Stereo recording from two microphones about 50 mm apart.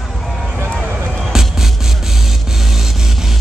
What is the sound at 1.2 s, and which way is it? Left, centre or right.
Music, centre.